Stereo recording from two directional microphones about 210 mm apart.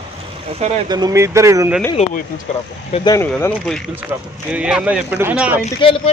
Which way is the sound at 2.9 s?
15° left (ahead or behind).